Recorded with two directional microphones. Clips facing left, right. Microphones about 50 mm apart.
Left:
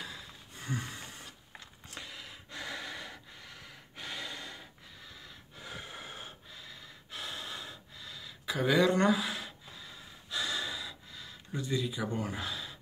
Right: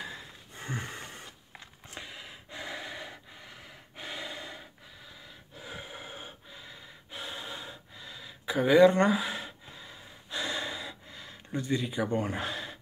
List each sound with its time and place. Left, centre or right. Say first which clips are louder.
0.0 s a sound: right 3 dB; right
1.9 s snort: right 2 dB; centre
5.6 s gasp: right 2 dB; centre; by 12.7 s right